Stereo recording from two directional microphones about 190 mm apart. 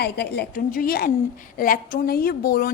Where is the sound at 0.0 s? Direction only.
60° left (ahead or behind).